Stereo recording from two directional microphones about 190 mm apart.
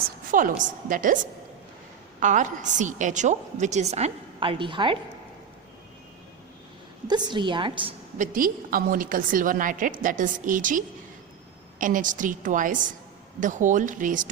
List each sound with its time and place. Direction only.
0.3 s a woman's voice: 45° right (ahead or behind)
2.2 s a woman's voice: 40° right (ahead or behind); by 4.9 s 25° right (ahead or behind)
7.1 s a woman's voice: 25° right (ahead or behind)
8.2 s a woman's voice: 45° right (ahead or behind)